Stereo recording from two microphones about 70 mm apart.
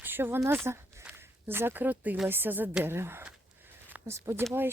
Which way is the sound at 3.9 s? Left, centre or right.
Right.